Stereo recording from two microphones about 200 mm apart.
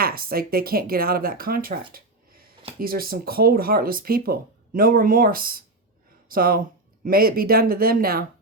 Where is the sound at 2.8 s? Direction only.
45° right (ahead or behind).